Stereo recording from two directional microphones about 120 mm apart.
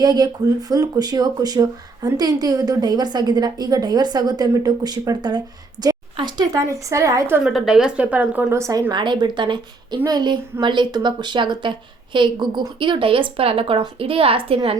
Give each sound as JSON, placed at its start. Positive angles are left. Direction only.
{"t": 0.0, "sound": "speech", "side_deg": -35}
{"t": 7.4, "sound": "speech", "side_deg": -5}
{"t": 8.4, "sound": "speech", "side_deg": -25}
{"t": 8.9, "sound": "a woman's voice", "side_deg": -40}